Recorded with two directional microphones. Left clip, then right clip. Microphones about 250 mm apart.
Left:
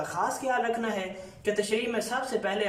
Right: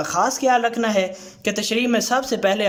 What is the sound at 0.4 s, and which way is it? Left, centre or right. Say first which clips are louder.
Speech: right 11 dB; right.